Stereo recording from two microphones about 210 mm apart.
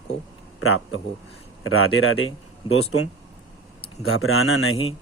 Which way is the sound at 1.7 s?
80° left.